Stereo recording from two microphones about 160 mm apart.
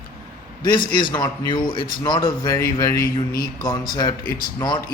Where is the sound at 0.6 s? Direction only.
30° left (ahead or behind).